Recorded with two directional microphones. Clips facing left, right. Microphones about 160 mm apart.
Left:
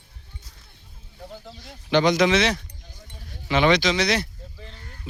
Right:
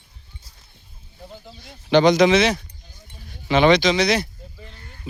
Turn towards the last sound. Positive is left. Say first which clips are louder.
# right 2 dB
turn(degrees=-5)  # may be behind; listen again after turning